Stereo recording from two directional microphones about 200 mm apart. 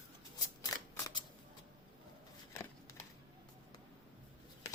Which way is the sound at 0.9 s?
20° left (ahead or behind).